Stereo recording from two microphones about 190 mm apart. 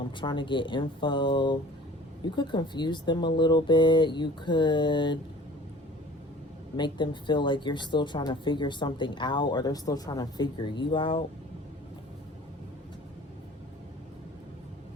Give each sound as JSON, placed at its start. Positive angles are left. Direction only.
{"t": 0.0, "sound": "speech", "side_deg": 25}
{"t": 6.7, "sound": "speech", "side_deg": 25}